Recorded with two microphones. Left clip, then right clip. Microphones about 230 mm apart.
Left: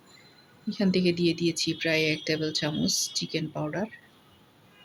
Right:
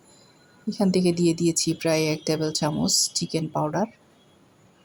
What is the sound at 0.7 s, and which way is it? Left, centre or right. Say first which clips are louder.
Speech: right 3 dB; centre.